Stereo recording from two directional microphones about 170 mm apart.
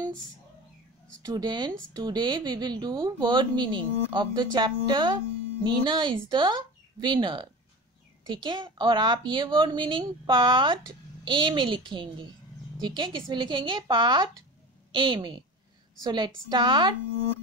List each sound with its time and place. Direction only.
1.2 s speech: 25° right (ahead or behind)